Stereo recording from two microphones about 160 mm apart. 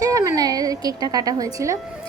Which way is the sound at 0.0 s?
20° right (ahead or behind).